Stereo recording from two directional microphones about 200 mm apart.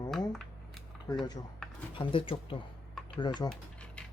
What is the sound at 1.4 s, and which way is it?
Speech, 20° left (ahead or behind).